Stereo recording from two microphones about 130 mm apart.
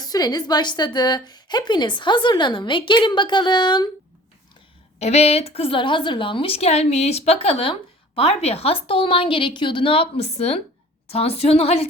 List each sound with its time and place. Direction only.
0.0 s a woman's voice: 30° left (ahead or behind)
4.9 s a woman's voice: 55° left (ahead or behind)